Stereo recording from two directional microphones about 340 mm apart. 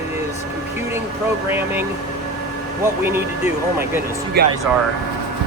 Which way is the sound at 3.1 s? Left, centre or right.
Centre.